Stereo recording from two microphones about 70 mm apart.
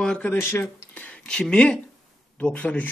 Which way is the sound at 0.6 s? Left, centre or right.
Left.